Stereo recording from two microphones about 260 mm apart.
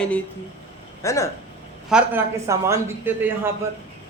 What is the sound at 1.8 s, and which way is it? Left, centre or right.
A man's voice, centre.